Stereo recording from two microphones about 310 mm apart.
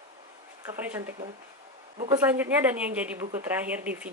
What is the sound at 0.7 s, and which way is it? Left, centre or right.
Speech, centre.